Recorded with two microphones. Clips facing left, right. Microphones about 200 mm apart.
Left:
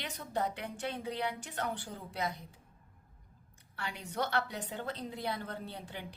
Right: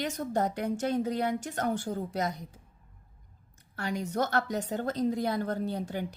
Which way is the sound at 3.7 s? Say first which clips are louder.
Right 7 dB; 45° right (ahead or behind).